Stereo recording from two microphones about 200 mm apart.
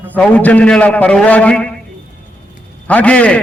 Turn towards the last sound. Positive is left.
turn(degrees=5)  # may be behind; listen again after turning